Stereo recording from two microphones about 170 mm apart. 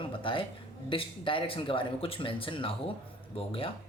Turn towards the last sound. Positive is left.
turn(degrees=35)  # may be behind; listen again after turning